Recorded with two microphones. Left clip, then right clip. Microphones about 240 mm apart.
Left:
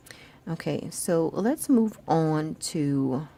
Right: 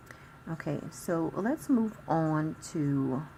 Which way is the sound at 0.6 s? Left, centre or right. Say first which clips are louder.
Left 6 dB; left.